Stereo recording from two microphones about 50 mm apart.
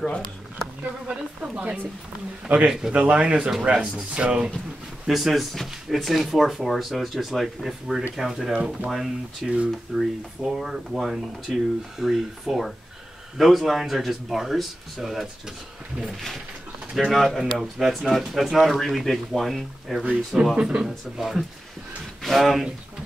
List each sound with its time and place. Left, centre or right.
0.0 s speech: centre
1.4 s speech: right
2.4 s speech: centre
5.1 s speech: centre
20.5 s speech: centre